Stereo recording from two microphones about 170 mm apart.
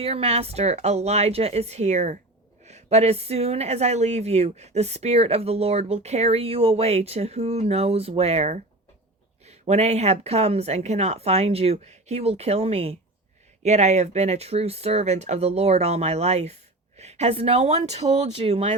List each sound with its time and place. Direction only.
0.0 s speech: 35° right (ahead or behind)